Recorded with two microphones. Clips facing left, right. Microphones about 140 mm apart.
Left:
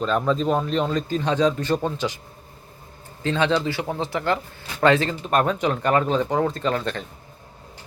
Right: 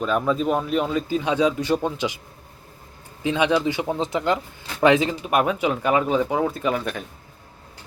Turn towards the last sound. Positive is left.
turn(degrees=-10)  # may be behind; listen again after turning